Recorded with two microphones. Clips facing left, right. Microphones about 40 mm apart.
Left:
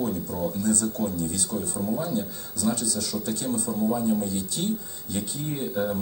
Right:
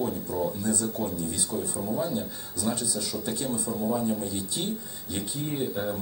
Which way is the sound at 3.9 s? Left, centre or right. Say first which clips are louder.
Left 2 dB; centre.